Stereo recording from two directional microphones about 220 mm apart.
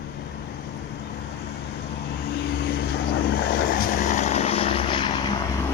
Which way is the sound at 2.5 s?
45° left (ahead or behind).